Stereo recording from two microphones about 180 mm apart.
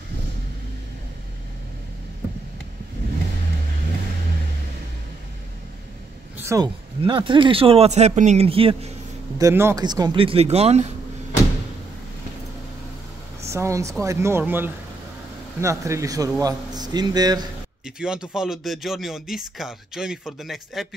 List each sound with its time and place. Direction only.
6.3 s a sound: 15° right (ahead or behind)
7.0 s speech: 25° right (ahead or behind)
9.4 s a man's voice: 15° right (ahead or behind); by 10.9 s 35° right (ahead or behind)
13.4 s a man's voice: 15° right (ahead or behind)
17.8 s speech: 5° right (ahead or behind)